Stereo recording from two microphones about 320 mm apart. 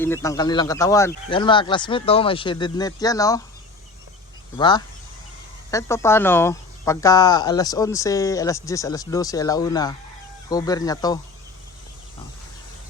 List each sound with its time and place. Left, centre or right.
0.0 s speech: centre
4.5 s speech: centre